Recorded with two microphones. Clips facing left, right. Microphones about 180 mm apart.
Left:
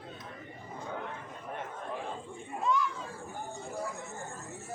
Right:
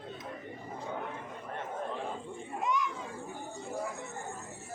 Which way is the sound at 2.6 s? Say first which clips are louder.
Left 2 dB; 20° right (ahead or behind).